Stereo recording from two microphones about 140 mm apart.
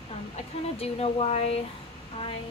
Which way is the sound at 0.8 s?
45° left (ahead or behind).